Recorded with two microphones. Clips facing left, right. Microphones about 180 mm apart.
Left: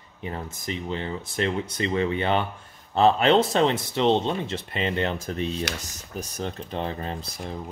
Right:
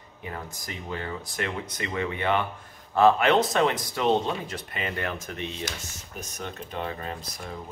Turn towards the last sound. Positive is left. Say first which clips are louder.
# left 3 dB
turn(degrees=30)  # may be behind; listen again after turning